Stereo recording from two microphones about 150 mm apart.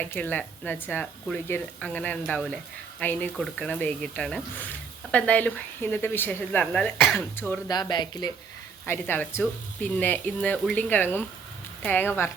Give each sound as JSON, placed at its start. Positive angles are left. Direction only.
{"t": 0.0, "sound": "speech", "side_deg": 10}
{"t": 7.3, "sound": "speech", "side_deg": 15}
{"t": 7.7, "sound": "speech", "side_deg": 30}
{"t": 8.9, "sound": "speech", "side_deg": 15}